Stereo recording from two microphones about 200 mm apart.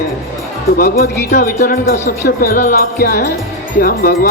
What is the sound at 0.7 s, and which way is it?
Speech, 50° left (ahead or behind).